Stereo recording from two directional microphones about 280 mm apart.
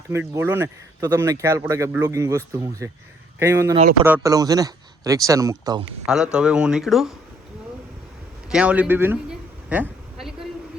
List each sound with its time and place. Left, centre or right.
0.1 s speech: centre
8.4 s speech: centre
9.8 s a sound: centre